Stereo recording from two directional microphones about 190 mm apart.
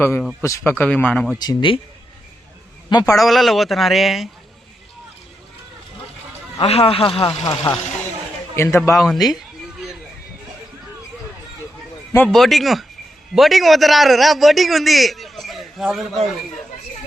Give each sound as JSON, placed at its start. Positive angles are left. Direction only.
{"t": 0.0, "sound": "speech", "side_deg": 10}
{"t": 1.4, "sound": "speech", "side_deg": 25}
{"t": 2.9, "sound": "speech", "side_deg": 20}
{"t": 3.2, "sound": "a man's voice", "side_deg": 0}
{"t": 6.6, "sound": "speech", "side_deg": 30}
{"t": 9.0, "sound": "a man's voice", "side_deg": 0}
{"t": 12.1, "sound": "a man's voice", "side_deg": 5}